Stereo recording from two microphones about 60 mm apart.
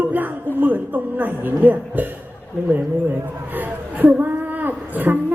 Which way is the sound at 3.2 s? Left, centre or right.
Right.